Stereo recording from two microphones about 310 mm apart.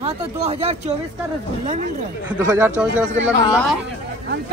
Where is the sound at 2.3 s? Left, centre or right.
Centre.